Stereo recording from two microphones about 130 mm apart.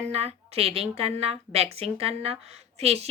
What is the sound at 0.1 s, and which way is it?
Speech, 55° right (ahead or behind).